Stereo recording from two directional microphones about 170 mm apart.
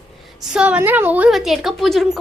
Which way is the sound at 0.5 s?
5° right (ahead or behind).